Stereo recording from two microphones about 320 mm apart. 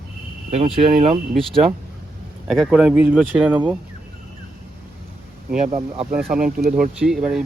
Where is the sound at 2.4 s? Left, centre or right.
Centre.